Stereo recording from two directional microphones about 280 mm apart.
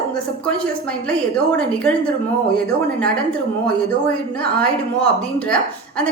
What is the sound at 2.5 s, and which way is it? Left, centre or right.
Speech, centre.